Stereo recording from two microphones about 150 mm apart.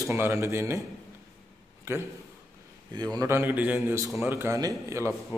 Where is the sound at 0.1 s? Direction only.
15° right (ahead or behind).